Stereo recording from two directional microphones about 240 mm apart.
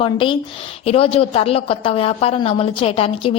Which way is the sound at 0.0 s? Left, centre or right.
Left.